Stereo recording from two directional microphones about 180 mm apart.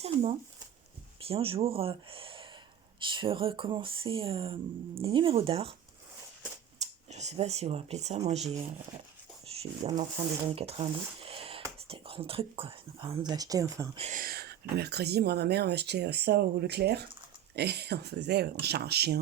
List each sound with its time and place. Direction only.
0.0 s speech: 35° right (ahead or behind)
6.7 s speech: 40° right (ahead or behind)
10.0 s speech: 35° right (ahead or behind)
13.9 s speech: 35° right (ahead or behind)
14.2 s speech: 55° right (ahead or behind)